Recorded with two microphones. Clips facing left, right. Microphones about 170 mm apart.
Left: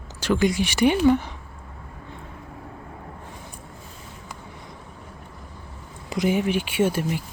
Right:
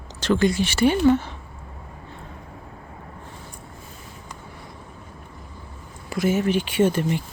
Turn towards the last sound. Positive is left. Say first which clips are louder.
# right 2 dB
turn(degrees=10)  # may be behind; listen again after turning